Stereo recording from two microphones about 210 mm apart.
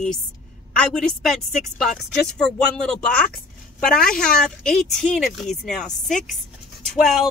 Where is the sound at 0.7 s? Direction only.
Centre (ahead or behind).